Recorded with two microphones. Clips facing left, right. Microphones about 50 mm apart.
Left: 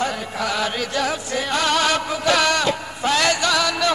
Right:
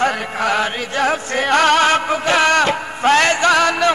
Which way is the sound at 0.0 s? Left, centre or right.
Right.